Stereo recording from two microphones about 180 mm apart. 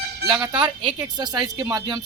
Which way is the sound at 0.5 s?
25° right (ahead or behind).